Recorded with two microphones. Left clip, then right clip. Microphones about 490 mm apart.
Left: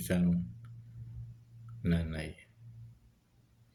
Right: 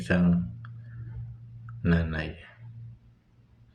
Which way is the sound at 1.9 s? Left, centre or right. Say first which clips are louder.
Right 8 dB; left.